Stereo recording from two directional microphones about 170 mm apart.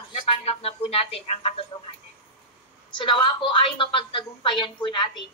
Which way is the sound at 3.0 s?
30° left (ahead or behind).